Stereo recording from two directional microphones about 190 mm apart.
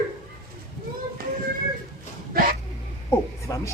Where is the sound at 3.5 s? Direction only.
20° left (ahead or behind).